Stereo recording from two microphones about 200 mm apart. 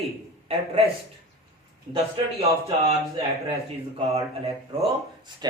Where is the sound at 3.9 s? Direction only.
30° right (ahead or behind).